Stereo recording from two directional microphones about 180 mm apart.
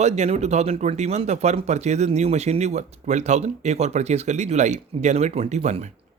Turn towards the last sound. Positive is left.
turn(degrees=-40)  # may be behind; listen again after turning